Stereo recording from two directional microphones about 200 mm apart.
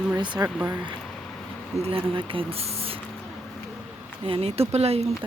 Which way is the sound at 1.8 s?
25° right (ahead or behind).